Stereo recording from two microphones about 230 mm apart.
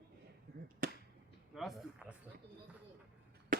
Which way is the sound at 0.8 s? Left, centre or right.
Right.